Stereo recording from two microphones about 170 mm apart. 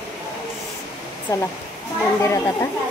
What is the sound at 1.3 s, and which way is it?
Speech, 20° left (ahead or behind).